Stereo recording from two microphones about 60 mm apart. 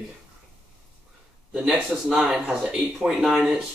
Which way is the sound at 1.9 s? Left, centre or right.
Centre.